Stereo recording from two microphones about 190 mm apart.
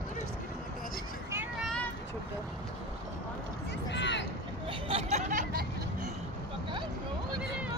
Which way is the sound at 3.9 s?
70° left (ahead or behind).